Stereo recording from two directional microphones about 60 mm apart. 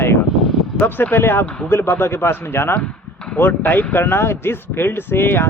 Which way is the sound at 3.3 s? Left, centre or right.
Left.